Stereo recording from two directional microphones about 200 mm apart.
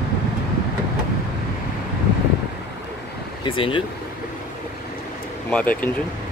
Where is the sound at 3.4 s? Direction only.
25° left (ahead or behind).